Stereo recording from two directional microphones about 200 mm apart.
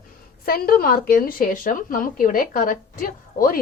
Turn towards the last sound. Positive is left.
turn(degrees=45)  # may be behind; listen again after turning